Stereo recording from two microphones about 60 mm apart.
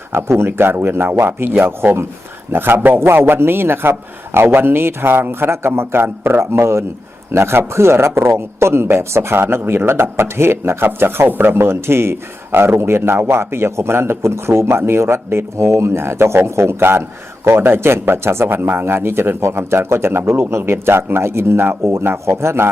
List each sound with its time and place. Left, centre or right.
0.1 s a man's voice: right